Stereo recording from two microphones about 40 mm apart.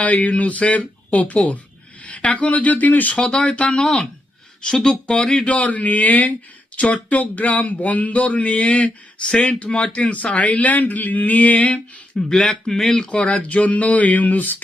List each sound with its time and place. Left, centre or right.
0.0 s speech: left
3.2 s speech: left
4.6 s speech: centre
5.5 s speech: left
12.3 s speech: centre
13.1 s speech: left